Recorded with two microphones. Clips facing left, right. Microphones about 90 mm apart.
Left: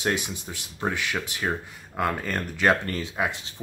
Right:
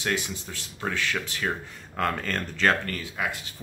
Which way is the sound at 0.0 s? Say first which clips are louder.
Left 2 dB; 20° left (ahead or behind).